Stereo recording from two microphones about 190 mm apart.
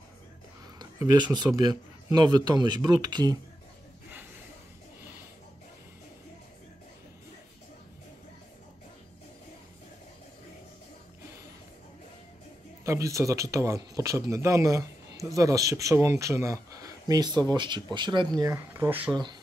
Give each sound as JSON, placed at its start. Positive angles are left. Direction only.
{"t": 0.7, "sound": "speech", "side_deg": -20}
{"t": 12.8, "sound": "speech", "side_deg": -15}